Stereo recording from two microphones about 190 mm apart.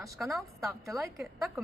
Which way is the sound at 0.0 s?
15° right (ahead or behind).